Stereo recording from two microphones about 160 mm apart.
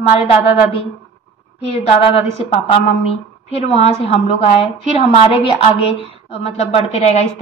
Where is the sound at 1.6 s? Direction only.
40° left (ahead or behind).